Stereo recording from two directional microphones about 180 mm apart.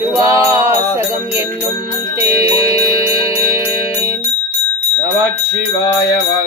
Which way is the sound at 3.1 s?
30° left (ahead or behind).